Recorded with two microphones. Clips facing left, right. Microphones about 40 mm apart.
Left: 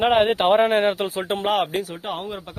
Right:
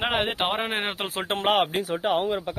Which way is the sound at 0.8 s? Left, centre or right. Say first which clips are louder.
Left 8 dB; right.